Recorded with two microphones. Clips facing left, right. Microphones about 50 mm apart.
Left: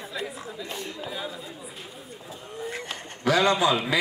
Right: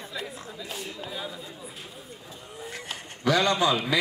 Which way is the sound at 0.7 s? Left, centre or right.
Centre.